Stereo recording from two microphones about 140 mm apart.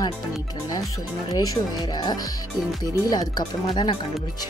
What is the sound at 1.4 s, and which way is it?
Music, 25° left (ahead or behind).